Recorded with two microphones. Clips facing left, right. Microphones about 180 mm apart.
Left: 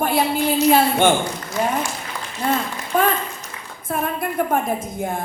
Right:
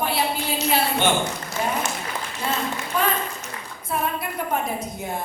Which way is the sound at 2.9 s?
50° left (ahead or behind).